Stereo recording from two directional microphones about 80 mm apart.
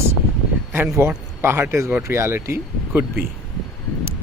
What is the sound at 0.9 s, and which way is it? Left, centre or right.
Speech, right.